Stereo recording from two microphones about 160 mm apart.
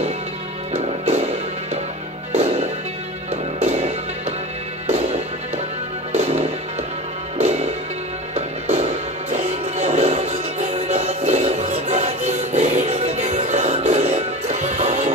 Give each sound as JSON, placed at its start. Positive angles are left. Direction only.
{"t": 0.7, "sound": "music", "side_deg": -40}
{"t": 3.6, "sound": "music", "side_deg": -40}
{"t": 6.1, "sound": "music", "side_deg": -45}